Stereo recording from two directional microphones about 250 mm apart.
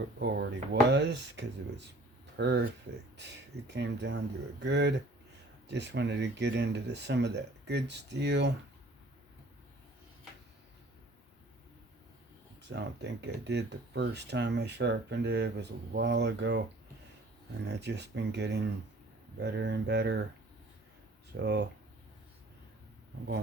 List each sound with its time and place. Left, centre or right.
0.2 s speech: right
12.6 s speech: right
17.7 s speech: right
21.3 s speech: right